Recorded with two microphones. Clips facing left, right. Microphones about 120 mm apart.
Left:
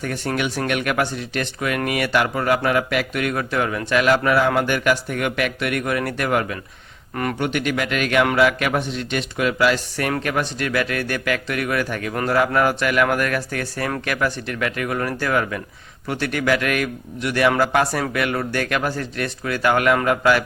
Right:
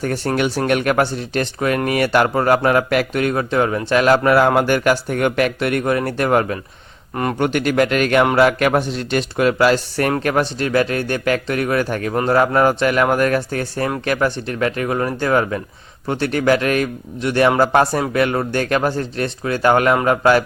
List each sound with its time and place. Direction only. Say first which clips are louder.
0.0 s speech: right 5 dB; 35° right (ahead or behind)